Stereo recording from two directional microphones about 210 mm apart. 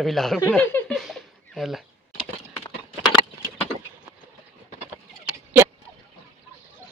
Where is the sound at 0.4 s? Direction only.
10° left (ahead or behind).